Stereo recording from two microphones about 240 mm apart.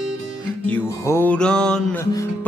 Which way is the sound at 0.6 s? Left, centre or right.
Centre.